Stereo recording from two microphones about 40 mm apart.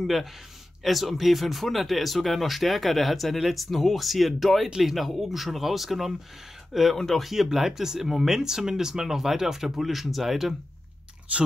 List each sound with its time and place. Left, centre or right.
0.0 s speech: centre
7.0 s speech: centre
7.2 s speech: centre
11.3 s speech: right